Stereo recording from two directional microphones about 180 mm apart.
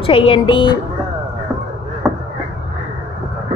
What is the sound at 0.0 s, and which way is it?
Speech, 30° left (ahead or behind).